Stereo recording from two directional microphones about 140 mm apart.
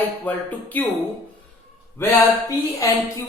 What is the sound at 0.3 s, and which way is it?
Speech, 10° left (ahead or behind).